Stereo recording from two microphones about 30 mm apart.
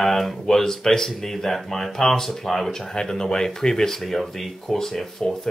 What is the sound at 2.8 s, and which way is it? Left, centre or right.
Speech, left.